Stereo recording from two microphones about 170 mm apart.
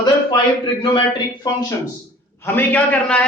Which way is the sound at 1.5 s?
25° left (ahead or behind).